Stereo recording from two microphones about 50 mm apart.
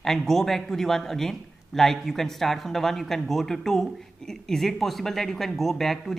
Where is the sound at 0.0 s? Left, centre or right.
Centre.